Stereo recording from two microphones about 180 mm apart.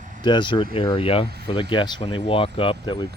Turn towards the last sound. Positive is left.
turn(degrees=25)  # may be behind; listen again after turning